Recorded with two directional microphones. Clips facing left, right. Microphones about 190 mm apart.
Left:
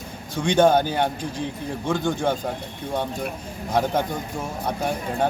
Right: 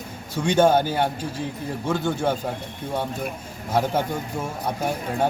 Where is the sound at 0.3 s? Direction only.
10° right (ahead or behind).